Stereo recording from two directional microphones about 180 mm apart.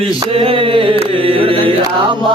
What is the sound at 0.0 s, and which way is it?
Mantra, 30° right (ahead or behind).